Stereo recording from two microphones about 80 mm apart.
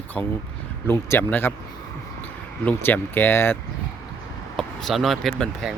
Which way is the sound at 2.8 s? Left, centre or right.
Left.